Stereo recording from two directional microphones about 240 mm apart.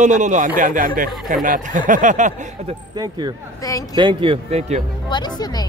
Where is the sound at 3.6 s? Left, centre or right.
Centre.